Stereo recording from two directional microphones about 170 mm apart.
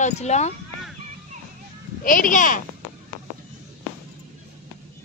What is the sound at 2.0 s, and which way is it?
Speech, 55° left (ahead or behind).